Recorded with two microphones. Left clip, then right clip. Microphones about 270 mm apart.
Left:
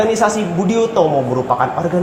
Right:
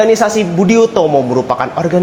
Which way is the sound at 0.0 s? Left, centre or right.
Right.